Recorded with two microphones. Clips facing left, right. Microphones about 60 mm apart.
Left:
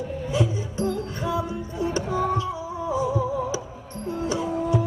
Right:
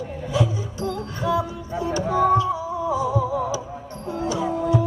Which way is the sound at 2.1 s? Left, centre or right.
Right.